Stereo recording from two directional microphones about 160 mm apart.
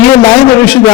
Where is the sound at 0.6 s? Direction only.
5° left (ahead or behind).